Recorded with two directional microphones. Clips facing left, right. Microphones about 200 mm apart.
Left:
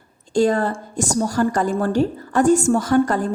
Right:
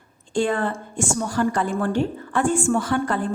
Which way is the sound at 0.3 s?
40° left (ahead or behind).